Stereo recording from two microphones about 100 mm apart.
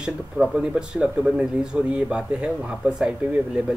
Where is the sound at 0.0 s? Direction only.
5° right (ahead or behind).